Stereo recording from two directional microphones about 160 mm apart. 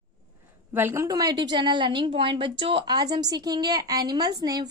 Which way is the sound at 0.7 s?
15° right (ahead or behind).